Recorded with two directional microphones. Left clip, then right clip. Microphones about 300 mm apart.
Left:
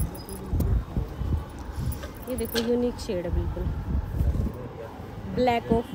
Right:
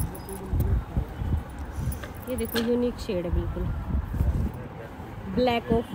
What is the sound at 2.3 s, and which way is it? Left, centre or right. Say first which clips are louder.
Speech: even; centre.